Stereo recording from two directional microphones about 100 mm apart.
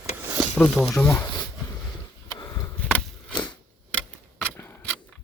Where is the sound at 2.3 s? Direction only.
40° left (ahead or behind).